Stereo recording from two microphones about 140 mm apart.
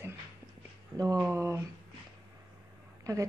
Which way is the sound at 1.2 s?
20° right (ahead or behind).